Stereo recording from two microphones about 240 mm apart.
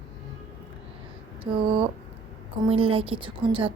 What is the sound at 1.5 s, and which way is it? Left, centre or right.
A woman's voice, right.